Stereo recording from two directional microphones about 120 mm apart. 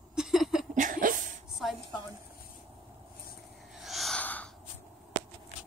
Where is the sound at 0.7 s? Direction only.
90° right.